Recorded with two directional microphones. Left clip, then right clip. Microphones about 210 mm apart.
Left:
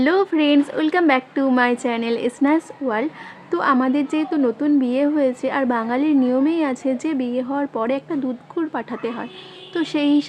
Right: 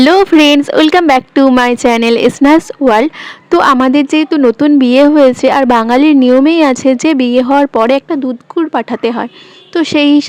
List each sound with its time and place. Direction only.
0.0 s a woman's voice: 45° right (ahead or behind)